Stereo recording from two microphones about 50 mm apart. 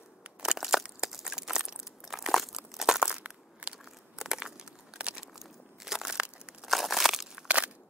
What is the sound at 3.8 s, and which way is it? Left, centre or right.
Crumpling, centre.